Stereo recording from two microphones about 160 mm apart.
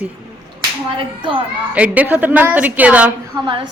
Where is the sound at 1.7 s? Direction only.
10° right (ahead or behind).